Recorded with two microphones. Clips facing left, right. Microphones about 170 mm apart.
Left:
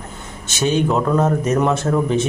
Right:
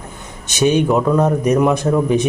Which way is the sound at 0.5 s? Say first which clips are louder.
Right 3 dB; 15° right (ahead or behind).